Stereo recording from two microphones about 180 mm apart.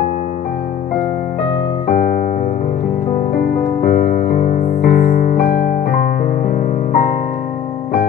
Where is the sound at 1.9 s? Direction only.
60° left (ahead or behind).